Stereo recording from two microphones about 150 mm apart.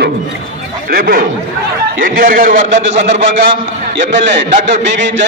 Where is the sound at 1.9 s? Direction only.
65° right (ahead or behind).